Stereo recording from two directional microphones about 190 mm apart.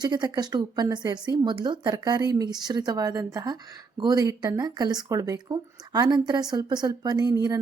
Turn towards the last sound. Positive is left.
turn(degrees=-20)  # may be behind; listen again after turning